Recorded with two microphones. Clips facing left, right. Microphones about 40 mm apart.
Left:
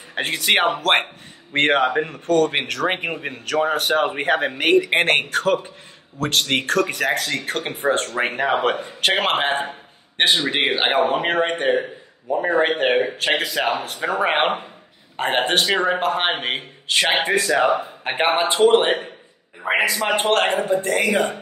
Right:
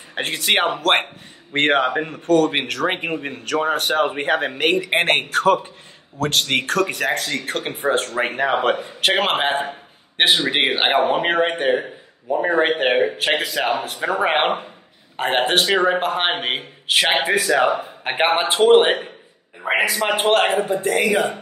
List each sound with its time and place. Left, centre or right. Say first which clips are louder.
0.1 s a man's voice: left 1 dB; centre
18.8 s a man's voice: right 4 dB; right
19.6 s a man's voice: even; centre